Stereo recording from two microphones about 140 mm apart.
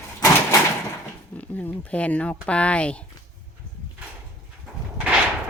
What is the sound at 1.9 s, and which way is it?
Speech, 10° left (ahead or behind).